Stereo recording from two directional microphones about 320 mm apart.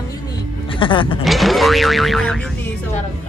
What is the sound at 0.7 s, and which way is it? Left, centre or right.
Speech, centre.